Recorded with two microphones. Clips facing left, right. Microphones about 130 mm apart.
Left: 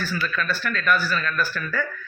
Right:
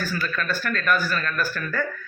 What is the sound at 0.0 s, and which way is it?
Speech, 45° right (ahead or behind).